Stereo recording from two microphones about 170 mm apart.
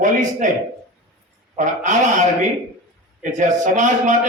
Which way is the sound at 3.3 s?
45° right (ahead or behind).